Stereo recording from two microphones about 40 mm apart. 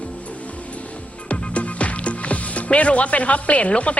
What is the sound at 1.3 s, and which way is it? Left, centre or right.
Speech, left.